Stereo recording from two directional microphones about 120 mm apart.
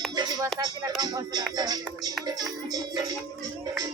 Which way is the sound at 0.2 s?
35° right (ahead or behind).